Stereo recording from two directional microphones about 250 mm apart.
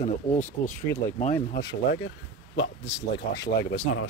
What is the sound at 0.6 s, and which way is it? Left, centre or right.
Speech, left.